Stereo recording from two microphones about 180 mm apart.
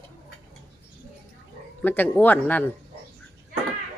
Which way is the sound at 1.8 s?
10° left (ahead or behind).